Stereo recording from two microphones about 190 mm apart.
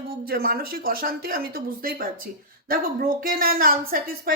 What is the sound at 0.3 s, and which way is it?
A woman's voice, 55° right (ahead or behind).